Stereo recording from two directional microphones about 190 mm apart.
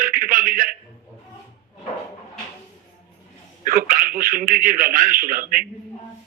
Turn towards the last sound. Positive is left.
turn(degrees=-45)  # may be behind; listen again after turning